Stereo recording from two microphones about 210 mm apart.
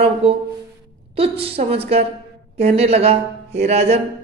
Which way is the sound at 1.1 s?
25° right (ahead or behind).